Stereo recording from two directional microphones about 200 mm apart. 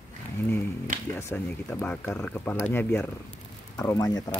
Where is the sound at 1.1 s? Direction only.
10° left (ahead or behind).